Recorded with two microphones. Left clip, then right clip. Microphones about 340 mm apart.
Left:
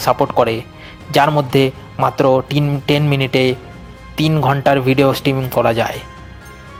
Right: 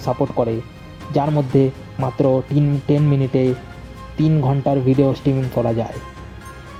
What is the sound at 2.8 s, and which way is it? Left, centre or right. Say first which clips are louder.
Speech: left 6 dB; left.